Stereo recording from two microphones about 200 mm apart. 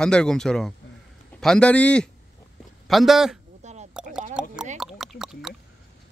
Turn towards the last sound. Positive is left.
turn(degrees=0)  # may be behind; listen again after turning